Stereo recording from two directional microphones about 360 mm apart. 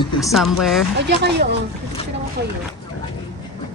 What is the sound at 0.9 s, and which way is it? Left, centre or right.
Speech, right.